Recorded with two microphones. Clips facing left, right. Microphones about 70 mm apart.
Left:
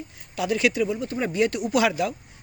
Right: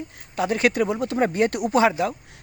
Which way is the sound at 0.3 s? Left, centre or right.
Right.